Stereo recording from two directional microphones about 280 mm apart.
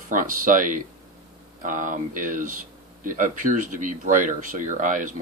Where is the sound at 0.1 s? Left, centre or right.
Right.